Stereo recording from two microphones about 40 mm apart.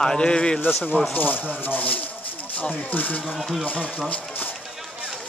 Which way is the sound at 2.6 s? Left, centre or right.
Left.